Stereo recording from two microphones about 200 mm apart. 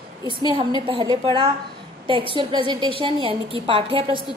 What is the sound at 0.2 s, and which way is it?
A woman's voice, 20° right (ahead or behind).